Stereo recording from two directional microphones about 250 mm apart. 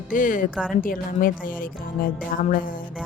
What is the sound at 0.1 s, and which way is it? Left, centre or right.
A woman's voice, left.